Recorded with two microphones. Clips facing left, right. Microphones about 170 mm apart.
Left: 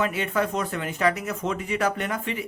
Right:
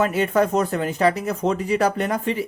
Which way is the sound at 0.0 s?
40° right (ahead or behind).